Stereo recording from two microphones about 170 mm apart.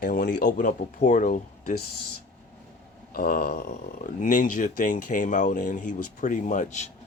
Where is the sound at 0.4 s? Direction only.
50° left (ahead or behind).